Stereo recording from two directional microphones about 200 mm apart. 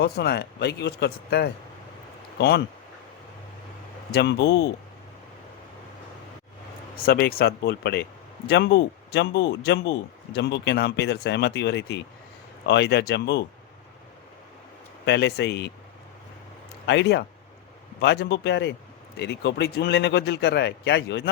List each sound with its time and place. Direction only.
0.0 s speech: 55° left (ahead or behind)
4.1 s speech: 60° left (ahead or behind)
6.9 s speech: 50° left (ahead or behind)
15.0 s speech: 60° left (ahead or behind)
16.8 s speech: 60° left (ahead or behind)